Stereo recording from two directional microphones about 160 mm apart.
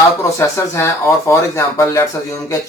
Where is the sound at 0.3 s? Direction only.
15° left (ahead or behind).